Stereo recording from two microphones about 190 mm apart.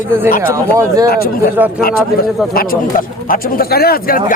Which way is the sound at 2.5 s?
50° left (ahead or behind).